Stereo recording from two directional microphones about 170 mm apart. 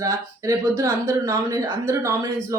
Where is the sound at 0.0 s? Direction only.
20° right (ahead or behind).